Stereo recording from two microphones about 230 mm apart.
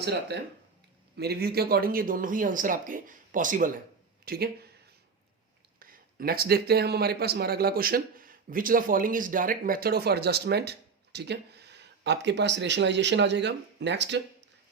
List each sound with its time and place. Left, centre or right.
0.0 s speech: right
5.8 s speech: right